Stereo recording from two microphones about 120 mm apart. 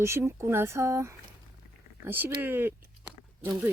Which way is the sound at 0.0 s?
20° right (ahead or behind).